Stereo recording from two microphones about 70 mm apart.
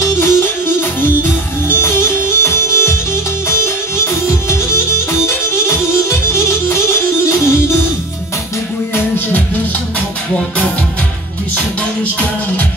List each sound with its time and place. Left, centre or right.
0.2 s music: left